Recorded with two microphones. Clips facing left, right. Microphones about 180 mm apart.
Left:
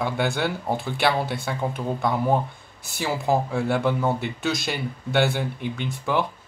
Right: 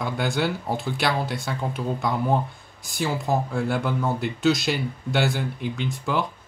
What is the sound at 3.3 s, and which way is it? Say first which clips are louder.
Speech: left 4 dB; centre (ahead or behind).